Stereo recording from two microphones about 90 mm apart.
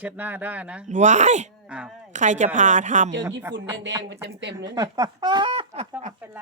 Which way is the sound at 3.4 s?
30° right (ahead or behind).